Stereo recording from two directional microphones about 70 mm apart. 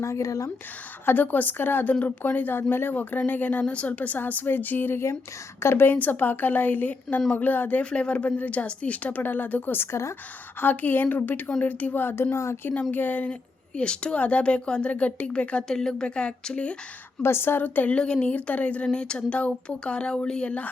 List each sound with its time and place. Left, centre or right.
0.0 s speech: left
1.0 s speech: left
10.6 s speech: left
12.9 s speech: left
13.7 s speech: centre
17.2 s speech: left
17.9 s speech: centre